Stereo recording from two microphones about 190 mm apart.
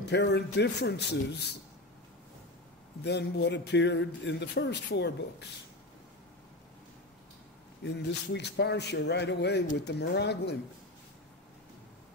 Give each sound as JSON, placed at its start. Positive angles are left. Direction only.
{"t": 0.1, "sound": "a man's voice", "side_deg": 65}
{"t": 3.0, "sound": "a man's voice", "side_deg": 60}
{"t": 7.8, "sound": "a man's voice", "side_deg": 65}